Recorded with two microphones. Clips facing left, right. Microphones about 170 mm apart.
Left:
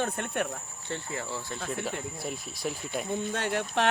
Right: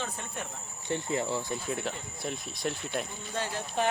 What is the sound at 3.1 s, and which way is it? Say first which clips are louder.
Speech: left 6 dB; 65° left (ahead or behind).